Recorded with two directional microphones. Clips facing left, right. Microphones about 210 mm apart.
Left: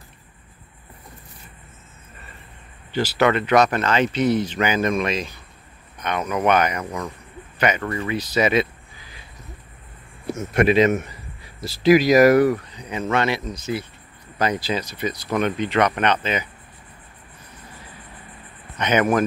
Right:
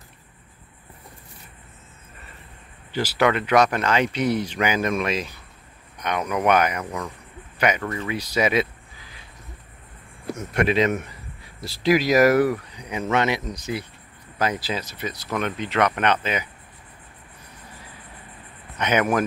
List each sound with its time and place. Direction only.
2.9 s speech: 10° right (ahead or behind)
6.8 s speech: 10° left (ahead or behind)
7.5 s speech: 10° right (ahead or behind)
10.2 s speech: 5° left (ahead or behind); by 13.8 s 15° right (ahead or behind)
14.4 s speech: 5° right (ahead or behind)
18.8 s speech: 5° right (ahead or behind)